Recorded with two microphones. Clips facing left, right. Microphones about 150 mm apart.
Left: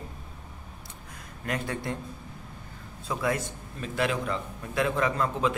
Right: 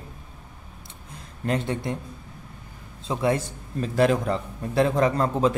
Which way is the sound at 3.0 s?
25° right (ahead or behind).